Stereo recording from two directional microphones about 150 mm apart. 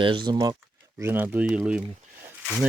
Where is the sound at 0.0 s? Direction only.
30° right (ahead or behind).